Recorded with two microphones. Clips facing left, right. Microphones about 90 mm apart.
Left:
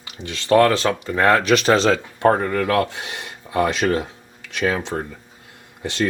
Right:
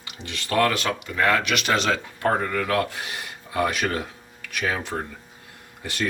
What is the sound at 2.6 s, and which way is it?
Speech, 25° left (ahead or behind).